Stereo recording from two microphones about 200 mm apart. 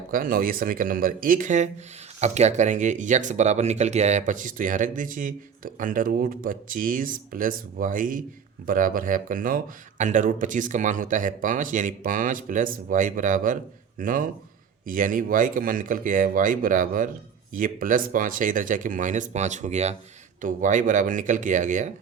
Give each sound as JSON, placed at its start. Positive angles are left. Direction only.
{"t": 0.1, "sound": "speech", "side_deg": -45}